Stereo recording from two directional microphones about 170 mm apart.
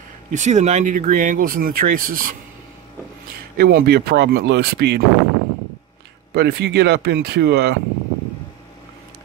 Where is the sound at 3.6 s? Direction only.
70° right (ahead or behind).